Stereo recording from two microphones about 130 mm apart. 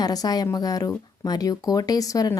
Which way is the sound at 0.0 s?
30° left (ahead or behind).